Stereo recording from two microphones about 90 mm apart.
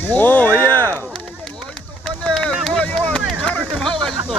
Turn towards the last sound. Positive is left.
turn(degrees=5)  # may be behind; listen again after turning